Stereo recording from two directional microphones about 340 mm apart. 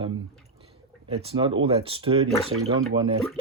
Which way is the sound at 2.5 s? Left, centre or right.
Right.